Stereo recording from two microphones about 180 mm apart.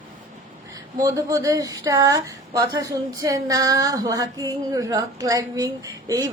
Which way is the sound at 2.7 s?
20° right (ahead or behind).